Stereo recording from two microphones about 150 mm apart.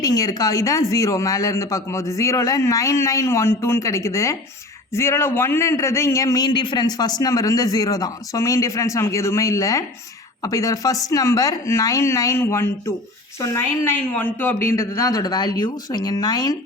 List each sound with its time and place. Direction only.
0.0 s a man's voice: 25° left (ahead or behind)